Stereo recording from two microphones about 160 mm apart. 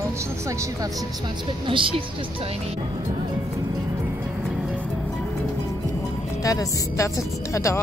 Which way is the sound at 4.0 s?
5° right (ahead or behind).